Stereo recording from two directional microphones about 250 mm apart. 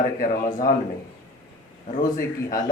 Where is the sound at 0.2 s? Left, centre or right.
Left.